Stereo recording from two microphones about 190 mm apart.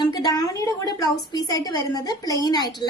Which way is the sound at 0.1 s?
20° left (ahead or behind).